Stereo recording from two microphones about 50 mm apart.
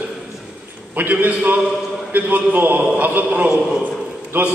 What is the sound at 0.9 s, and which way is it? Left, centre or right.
A man's voice, right.